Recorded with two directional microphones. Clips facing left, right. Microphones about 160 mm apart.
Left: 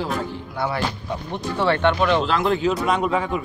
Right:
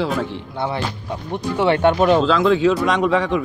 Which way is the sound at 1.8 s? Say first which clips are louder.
Right 6 dB; 40° right (ahead or behind).